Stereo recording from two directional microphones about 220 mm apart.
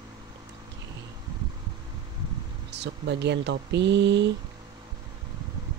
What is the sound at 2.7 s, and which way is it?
Speech, 50° right (ahead or behind).